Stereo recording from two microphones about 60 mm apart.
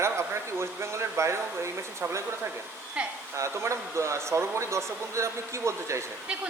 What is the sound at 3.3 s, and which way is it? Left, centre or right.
Speech, right.